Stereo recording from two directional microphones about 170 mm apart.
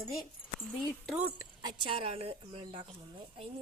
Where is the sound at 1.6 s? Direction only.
25° right (ahead or behind).